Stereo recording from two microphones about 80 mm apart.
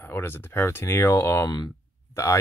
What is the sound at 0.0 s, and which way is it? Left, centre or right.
Speech, left.